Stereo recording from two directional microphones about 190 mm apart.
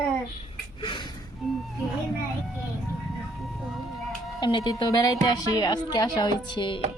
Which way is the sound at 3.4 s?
Centre (ahead or behind).